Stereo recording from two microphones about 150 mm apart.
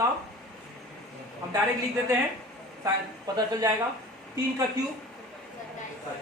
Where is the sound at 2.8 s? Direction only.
25° right (ahead or behind).